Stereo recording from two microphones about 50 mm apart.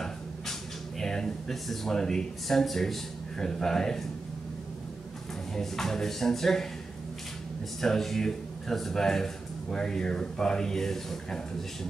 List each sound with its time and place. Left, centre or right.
0.0 s a sound: centre
5.5 s a man's voice: centre
7.8 s a man's voice: centre